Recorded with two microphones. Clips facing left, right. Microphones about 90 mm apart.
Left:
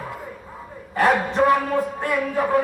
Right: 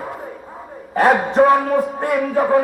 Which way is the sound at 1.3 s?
35° right (ahead or behind).